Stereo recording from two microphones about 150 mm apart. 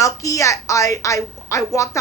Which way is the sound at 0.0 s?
20° left (ahead or behind).